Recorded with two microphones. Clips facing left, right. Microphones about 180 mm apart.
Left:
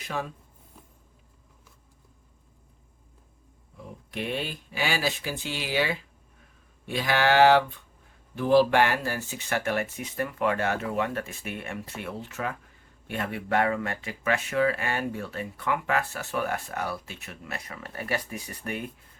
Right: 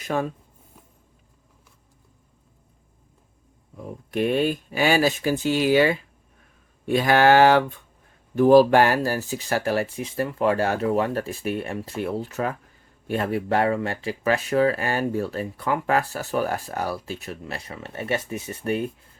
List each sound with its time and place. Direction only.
0.0 s speech: 50° right (ahead or behind)
3.8 s speech: 45° right (ahead or behind); by 18.9 s 30° right (ahead or behind)